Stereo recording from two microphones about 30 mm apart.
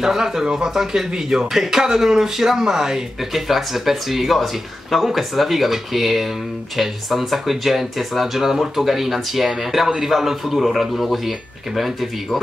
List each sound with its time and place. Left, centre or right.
0.2 s speech: right; by 12.1 s centre